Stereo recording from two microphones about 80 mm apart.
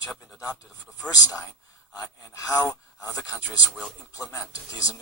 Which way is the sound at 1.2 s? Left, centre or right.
Left.